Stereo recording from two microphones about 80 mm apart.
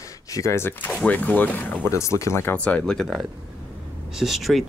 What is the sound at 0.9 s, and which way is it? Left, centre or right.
Speech, centre.